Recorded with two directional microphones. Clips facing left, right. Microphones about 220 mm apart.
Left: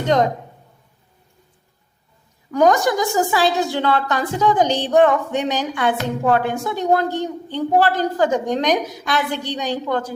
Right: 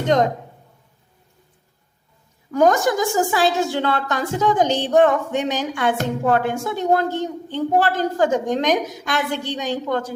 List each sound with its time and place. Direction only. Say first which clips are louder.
0.1 s a woman's voice: even; 45° right (ahead or behind)
2.5 s a woman's voice: left 1 dB; 45° right (ahead or behind)